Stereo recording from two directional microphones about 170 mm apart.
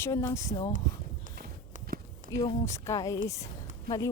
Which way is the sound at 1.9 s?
55° right (ahead or behind).